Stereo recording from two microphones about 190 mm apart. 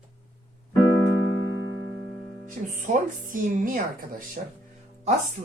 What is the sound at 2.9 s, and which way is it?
A woman's voice, 45° right (ahead or behind).